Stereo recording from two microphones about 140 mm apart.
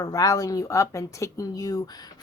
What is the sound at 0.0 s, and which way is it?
Speech, 25° left (ahead or behind).